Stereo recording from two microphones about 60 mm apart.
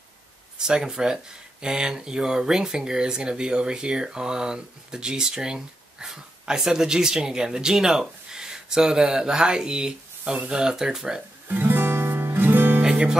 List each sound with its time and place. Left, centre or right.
0.6 s speech: centre
11.4 s music: right
12.8 s music: centre